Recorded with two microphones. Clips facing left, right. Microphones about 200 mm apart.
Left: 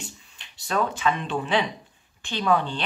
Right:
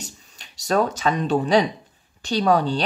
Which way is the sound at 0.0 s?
40° right (ahead or behind).